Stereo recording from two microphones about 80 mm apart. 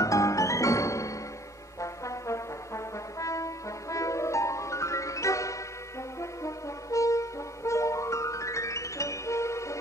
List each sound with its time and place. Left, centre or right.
0.0 s music: left
1.8 s brass instrument: left